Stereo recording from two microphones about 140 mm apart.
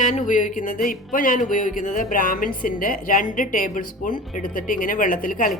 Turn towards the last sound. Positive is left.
turn(degrees=80)